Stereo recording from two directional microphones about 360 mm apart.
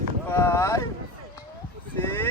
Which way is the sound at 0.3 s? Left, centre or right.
Centre.